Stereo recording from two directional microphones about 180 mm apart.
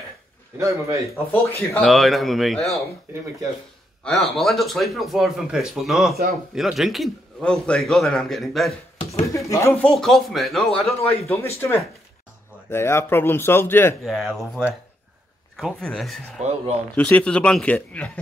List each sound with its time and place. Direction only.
0.6 s a man's voice: 15° right (ahead or behind)
1.1 s speech: 15° left (ahead or behind)
1.8 s a man's voice: centre (ahead or behind)
4.0 s a man's voice: centre (ahead or behind)
9.5 s a man's voice: 15° left (ahead or behind)
11.1 s speech: 15° left (ahead or behind)
14.0 s a man's voice: centre (ahead or behind)
16.4 s speech: 40° right (ahead or behind)
16.9 s speech: 5° left (ahead or behind)